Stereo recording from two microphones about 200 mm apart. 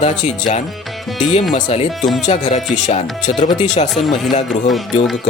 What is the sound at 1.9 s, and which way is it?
Speech, centre (ahead or behind).